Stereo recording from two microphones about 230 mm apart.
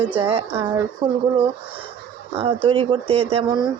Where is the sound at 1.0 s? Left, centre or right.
Centre.